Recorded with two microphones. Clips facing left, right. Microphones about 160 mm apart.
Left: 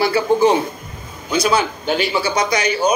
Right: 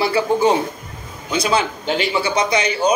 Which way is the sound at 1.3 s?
25° right (ahead or behind).